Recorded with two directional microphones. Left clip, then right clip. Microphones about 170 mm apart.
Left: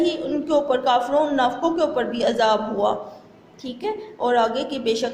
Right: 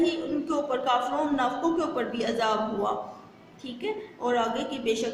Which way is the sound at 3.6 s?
40° left (ahead or behind).